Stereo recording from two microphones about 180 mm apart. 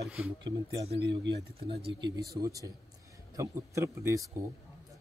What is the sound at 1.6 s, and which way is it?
Speech, 30° right (ahead or behind).